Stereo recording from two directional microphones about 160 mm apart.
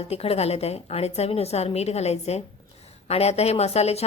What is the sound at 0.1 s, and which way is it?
A woman's voice, 40° left (ahead or behind).